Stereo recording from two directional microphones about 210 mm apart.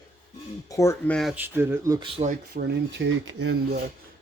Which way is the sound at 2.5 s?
60° right (ahead or behind).